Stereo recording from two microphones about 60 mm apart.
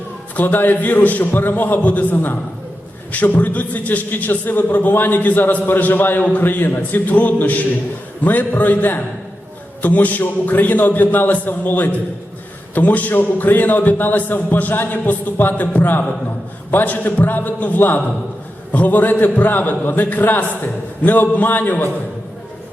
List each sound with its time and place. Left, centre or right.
0.3 s a man's voice: left